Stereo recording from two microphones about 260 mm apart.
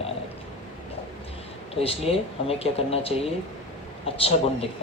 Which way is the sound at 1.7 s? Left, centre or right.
Left.